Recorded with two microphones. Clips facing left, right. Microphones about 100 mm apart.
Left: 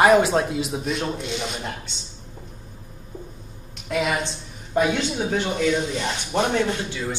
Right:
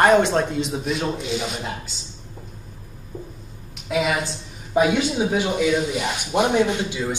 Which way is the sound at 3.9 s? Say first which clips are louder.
Right 2 dB; 5° right (ahead or behind).